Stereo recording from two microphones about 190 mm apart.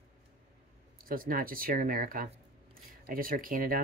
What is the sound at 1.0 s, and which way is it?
Speech, 50° right (ahead or behind).